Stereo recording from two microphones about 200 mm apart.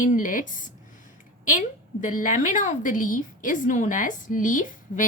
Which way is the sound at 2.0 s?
40° left (ahead or behind).